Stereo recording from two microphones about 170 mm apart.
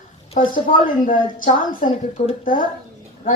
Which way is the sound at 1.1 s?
50° left (ahead or behind).